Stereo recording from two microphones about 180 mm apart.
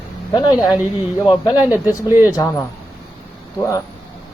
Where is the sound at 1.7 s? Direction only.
10° right (ahead or behind).